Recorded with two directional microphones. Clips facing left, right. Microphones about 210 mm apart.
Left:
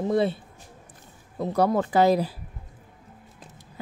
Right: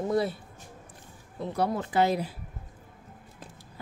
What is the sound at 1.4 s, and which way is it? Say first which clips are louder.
Speech: left 6 dB; 40° left (ahead or behind).